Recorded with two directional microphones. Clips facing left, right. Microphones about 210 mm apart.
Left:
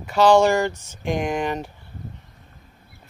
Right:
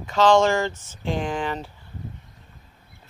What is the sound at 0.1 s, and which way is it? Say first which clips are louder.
Speech: left 2 dB; 10° left (ahead or behind).